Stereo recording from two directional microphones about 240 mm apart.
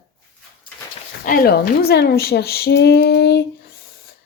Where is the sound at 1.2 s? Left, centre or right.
Left.